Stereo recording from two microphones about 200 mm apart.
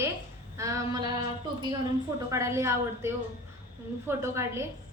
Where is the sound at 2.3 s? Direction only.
15° right (ahead or behind).